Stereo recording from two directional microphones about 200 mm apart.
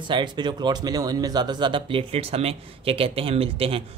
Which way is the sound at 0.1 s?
20° right (ahead or behind).